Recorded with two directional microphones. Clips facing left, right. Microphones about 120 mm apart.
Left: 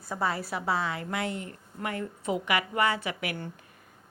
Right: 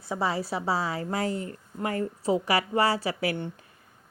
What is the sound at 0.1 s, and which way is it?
A woman's voice, 25° right (ahead or behind).